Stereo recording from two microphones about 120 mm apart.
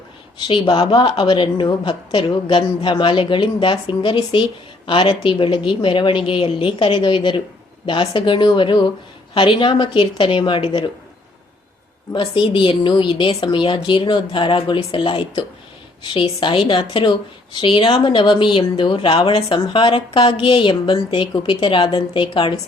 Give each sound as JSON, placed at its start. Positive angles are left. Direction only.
{"t": 0.3, "sound": "a woman's voice", "side_deg": 45}
{"t": 12.1, "sound": "a woman's voice", "side_deg": 40}